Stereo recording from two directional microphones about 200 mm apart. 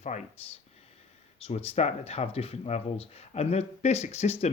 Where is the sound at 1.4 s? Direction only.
30° left (ahead or behind).